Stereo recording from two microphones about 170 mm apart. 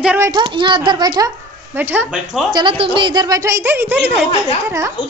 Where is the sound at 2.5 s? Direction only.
30° right (ahead or behind).